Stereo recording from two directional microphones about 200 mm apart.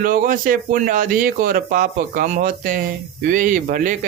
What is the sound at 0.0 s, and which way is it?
A man's voice, 45° right (ahead or behind).